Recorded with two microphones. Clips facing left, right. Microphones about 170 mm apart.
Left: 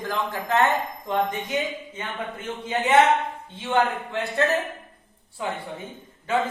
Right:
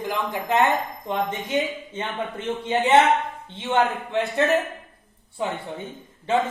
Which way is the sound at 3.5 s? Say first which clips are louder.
Right 1 dB; 20° right (ahead or behind).